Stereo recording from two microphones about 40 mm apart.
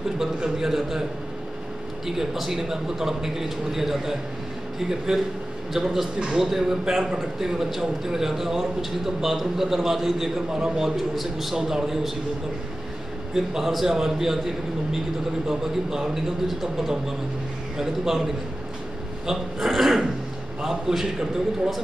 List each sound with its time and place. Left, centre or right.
0.4 s a man's voice: centre
2.0 s a man's voice: centre
11.0 s a man's voice: centre
13.3 s a man's voice: centre